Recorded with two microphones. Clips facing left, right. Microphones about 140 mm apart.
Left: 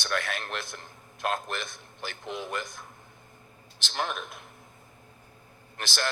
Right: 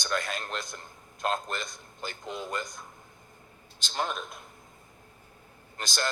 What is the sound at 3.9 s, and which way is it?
Speech, 5° left (ahead or behind).